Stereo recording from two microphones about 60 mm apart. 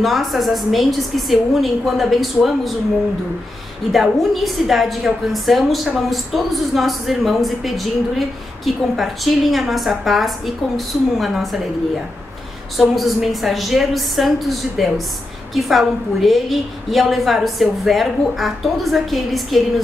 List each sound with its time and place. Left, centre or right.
0.0 s speech: centre
3.9 s speech: centre
12.7 s speech: centre